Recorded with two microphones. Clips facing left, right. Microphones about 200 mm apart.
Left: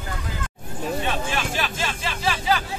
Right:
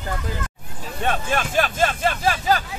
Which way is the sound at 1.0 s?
50° right (ahead or behind).